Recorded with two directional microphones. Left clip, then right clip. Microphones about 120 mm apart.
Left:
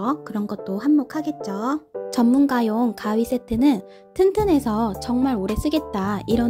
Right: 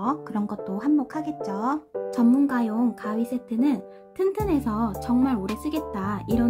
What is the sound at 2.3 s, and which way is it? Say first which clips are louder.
Speech: left 4 dB; 60° left (ahead or behind).